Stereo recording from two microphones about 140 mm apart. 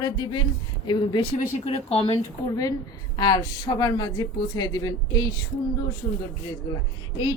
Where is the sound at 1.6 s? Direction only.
45° left (ahead or behind).